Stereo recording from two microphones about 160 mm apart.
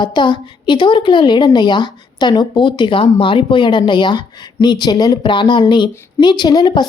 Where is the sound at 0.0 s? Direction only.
30° left (ahead or behind).